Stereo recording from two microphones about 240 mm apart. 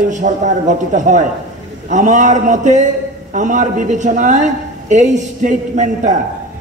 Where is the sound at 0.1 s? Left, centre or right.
Right.